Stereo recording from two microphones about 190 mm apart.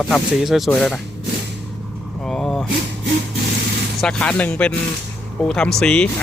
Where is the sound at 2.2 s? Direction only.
Centre (ahead or behind).